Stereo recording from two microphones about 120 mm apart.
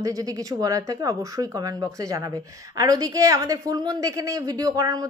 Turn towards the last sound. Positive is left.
turn(degrees=-30)  # may be behind; listen again after turning